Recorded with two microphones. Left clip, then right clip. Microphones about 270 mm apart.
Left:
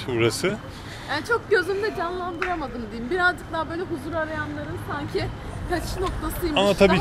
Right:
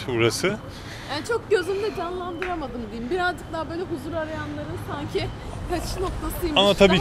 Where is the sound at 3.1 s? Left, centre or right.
Centre.